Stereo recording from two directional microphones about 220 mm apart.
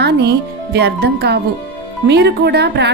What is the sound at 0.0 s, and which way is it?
A woman's voice, 50° right (ahead or behind).